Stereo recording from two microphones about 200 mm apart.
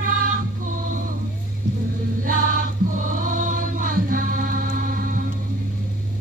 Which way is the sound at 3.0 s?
40° right (ahead or behind).